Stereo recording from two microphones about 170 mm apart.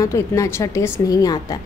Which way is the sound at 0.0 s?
15° left (ahead or behind).